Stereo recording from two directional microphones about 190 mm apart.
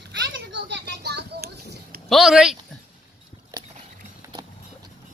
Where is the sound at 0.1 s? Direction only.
65° right (ahead or behind).